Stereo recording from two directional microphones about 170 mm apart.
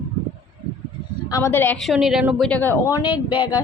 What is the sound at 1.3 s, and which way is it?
A woman's voice, 20° left (ahead or behind).